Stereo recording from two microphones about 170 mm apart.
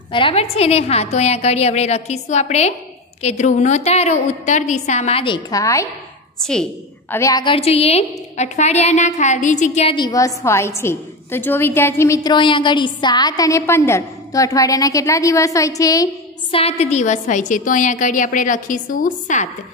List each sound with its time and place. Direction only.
0.1 s a woman's voice: 35° left (ahead or behind)
6.4 s a woman's voice: 5° left (ahead or behind)
7.2 s a woman's voice: 20° left (ahead or behind); by 9.9 s 45° left (ahead or behind)
9.9 s a woman's voice: 20° left (ahead or behind)
16.5 s a woman's voice: 40° left (ahead or behind)